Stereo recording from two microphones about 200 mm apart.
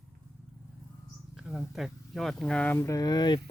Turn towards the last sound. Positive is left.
turn(degrees=20)  # may be behind; listen again after turning